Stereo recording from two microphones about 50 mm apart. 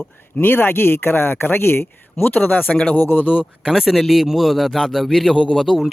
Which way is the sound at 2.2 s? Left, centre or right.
Left.